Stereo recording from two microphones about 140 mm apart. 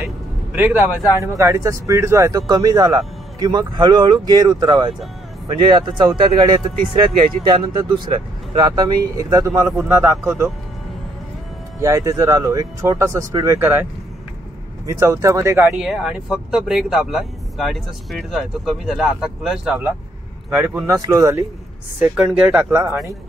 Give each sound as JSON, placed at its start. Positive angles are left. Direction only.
{"t": 0.0, "sound": "a sound", "side_deg": -10}
{"t": 1.2, "sound": "speech", "side_deg": -20}
{"t": 11.8, "sound": "speech", "side_deg": -25}
{"t": 14.9, "sound": "speech", "side_deg": -25}
{"t": 15.9, "sound": "speech", "side_deg": -5}
{"t": 20.4, "sound": "speech", "side_deg": -15}
{"t": 22.0, "sound": "speech", "side_deg": -10}